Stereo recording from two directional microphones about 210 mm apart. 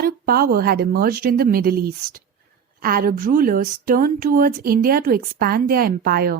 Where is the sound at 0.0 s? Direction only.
45° right (ahead or behind).